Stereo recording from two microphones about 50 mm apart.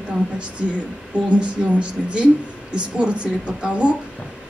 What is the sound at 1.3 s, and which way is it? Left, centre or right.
Speech, right.